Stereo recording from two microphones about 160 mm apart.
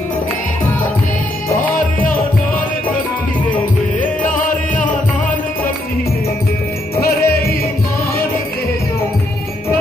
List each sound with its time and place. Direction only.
4.2 s music: 55° left (ahead or behind)
7.0 s music: 75° left (ahead or behind)